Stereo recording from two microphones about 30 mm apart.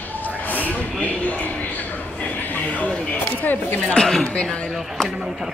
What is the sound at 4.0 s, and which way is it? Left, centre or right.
Speech, left.